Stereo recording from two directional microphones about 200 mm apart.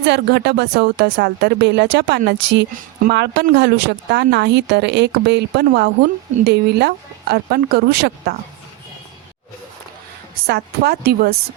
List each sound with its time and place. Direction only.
0.0 s a woman's voice: 60° right (ahead or behind)
10.4 s speech: 55° right (ahead or behind)